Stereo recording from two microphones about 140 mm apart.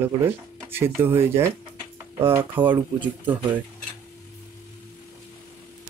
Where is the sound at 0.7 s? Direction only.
15° right (ahead or behind).